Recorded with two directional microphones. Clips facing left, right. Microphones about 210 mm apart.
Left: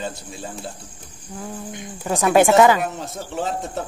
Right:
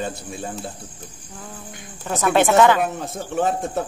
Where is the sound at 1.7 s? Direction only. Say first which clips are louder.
Left 2 dB; 15° left (ahead or behind).